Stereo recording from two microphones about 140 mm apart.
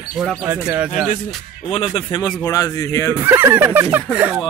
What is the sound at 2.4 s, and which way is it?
Speech, 25° left (ahead or behind).